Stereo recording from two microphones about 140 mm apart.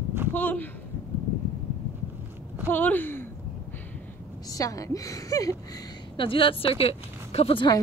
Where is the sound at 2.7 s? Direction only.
15° left (ahead or behind).